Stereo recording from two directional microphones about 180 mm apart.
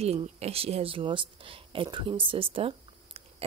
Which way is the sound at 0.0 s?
35° right (ahead or behind).